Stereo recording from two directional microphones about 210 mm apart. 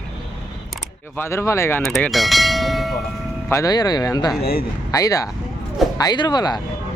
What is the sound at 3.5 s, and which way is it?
Speech, 15° left (ahead or behind).